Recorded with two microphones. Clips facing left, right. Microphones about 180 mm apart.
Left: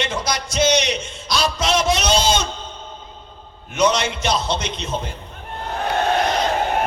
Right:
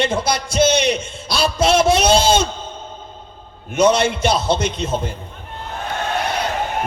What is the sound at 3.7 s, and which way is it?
Music, 50° right (ahead or behind).